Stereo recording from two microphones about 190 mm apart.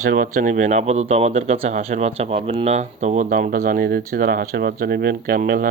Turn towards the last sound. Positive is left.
turn(degrees=-50)  # may be behind; listen again after turning